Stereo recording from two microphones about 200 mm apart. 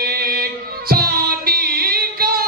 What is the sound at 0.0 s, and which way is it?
Music, 50° right (ahead or behind).